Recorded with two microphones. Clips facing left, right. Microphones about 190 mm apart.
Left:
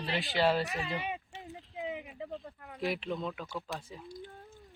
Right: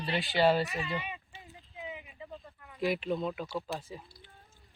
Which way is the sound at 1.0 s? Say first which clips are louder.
Left 5 dB; 70° left (ahead or behind).